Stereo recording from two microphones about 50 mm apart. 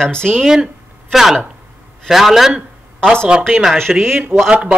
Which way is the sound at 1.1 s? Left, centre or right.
Centre.